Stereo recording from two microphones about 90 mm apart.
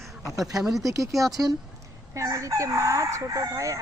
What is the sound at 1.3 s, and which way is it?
Speech, 45° right (ahead or behind).